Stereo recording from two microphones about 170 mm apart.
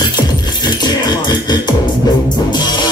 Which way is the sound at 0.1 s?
25° left (ahead or behind).